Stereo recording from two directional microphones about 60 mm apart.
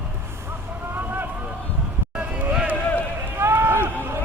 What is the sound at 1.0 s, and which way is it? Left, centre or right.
Vehicle, right.